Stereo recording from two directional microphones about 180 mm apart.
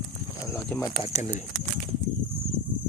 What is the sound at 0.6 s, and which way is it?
Pigeon, 15° left (ahead or behind).